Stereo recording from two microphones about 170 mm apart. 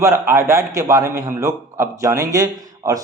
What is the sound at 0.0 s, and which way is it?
A man's voice, 15° right (ahead or behind).